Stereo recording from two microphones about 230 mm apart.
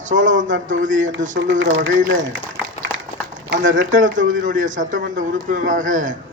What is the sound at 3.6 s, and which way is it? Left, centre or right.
A man's voice, right.